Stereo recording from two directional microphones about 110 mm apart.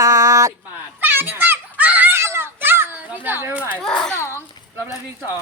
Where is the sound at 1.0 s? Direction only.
20° right (ahead or behind).